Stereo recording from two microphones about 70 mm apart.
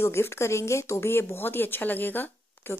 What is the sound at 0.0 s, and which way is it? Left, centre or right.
Speech, left.